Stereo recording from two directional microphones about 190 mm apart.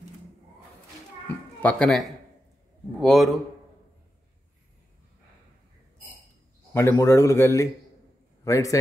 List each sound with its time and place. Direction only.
1.6 s speech: 5° left (ahead or behind)
6.7 s a man's voice: 10° left (ahead or behind)